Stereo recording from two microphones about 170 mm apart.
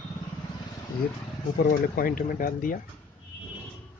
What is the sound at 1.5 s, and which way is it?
Speech, 55° left (ahead or behind).